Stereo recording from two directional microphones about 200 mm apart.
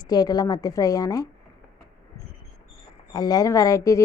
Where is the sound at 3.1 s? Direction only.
20° left (ahead or behind).